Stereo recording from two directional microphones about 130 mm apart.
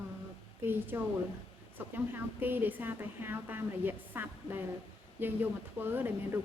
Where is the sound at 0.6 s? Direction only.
15° right (ahead or behind).